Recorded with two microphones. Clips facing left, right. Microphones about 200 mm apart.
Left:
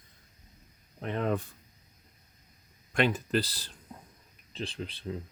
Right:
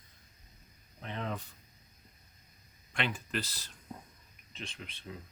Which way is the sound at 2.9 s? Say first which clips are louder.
Left 9 dB; 40° left (ahead or behind).